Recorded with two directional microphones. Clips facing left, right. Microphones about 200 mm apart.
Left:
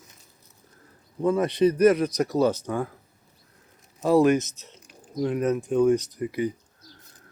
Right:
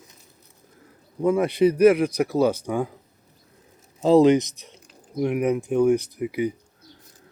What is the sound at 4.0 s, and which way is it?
A man's voice, 20° right (ahead or behind).